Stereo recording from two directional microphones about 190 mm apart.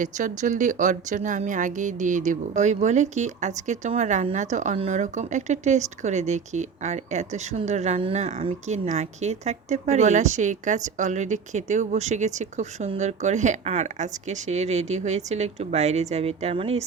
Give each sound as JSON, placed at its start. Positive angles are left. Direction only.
{"t": 0.0, "sound": "a woman's voice", "side_deg": -40}